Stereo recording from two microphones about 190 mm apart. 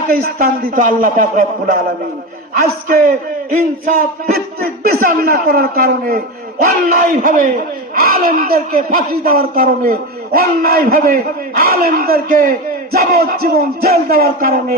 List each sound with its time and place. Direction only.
0.1 s a man's voice: 45° right (ahead or behind)
2.8 s a man's voice: 45° right (ahead or behind)